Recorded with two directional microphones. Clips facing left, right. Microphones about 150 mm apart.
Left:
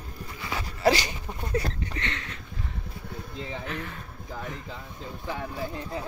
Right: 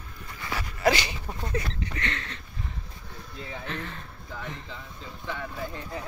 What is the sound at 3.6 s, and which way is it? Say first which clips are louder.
Speech: left 1 dB; 10° left (ahead or behind).